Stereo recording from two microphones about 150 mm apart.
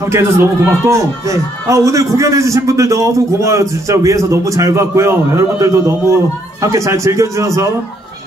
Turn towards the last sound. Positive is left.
turn(degrees=-20)  # may be behind; listen again after turning